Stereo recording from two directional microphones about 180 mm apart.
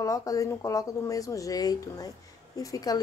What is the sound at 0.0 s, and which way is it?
Speech, 20° left (ahead or behind).